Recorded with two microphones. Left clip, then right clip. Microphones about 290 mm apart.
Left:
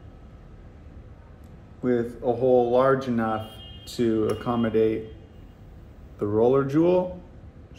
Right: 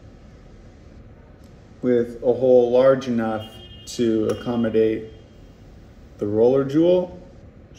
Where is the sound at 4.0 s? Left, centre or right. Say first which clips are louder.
Right 3 dB; centre.